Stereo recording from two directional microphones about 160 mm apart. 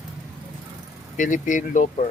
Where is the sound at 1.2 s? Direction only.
55° left (ahead or behind).